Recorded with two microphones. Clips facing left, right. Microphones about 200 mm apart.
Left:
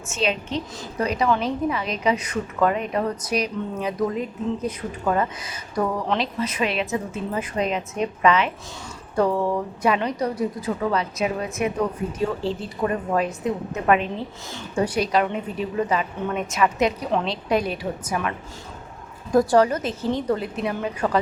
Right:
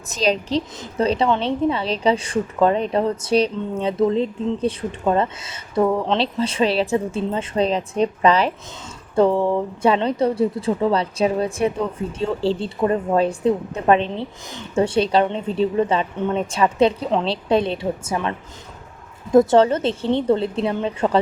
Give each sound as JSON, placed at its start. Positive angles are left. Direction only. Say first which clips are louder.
{"t": 0.1, "sound": "a woman's voice", "louder": "right 5 dB", "side_deg": -35}